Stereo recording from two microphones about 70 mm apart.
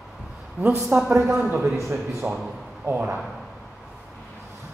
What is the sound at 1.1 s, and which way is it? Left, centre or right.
Speech, right.